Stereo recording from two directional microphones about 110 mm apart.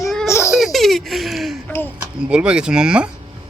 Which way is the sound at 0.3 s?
25° left (ahead or behind).